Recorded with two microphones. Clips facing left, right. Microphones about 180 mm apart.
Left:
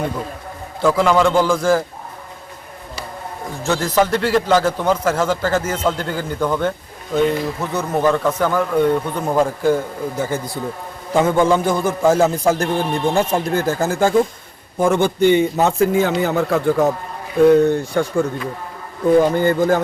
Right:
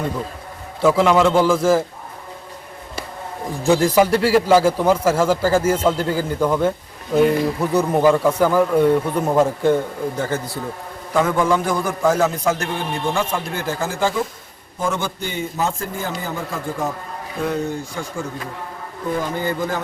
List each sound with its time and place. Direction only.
0.8 s a man's voice: 5° right (ahead or behind)
3.6 s a man's voice: 15° right (ahead or behind); by 10.6 s 15° left (ahead or behind)
11.1 s a man's voice: 25° left (ahead or behind); by 14.2 s 45° left (ahead or behind)
14.8 s a man's voice: 60° left (ahead or behind)
19.2 s speech: 50° left (ahead or behind)